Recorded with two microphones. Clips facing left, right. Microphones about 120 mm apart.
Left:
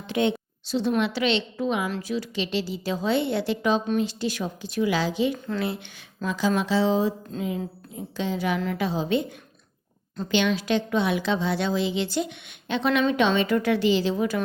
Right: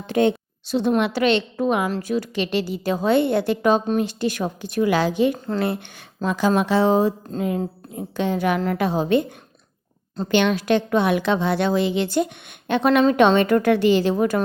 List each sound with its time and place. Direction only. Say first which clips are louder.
0.1 s a woman's voice: right 5 dB; 45° right (ahead or behind)
10.3 s a woman's voice: right 4 dB; 55° right (ahead or behind)